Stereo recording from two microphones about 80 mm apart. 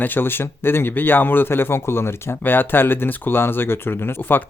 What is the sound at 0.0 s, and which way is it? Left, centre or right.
A man's voice, left.